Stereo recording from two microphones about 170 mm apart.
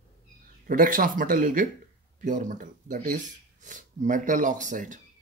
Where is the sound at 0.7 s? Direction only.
55° right (ahead or behind).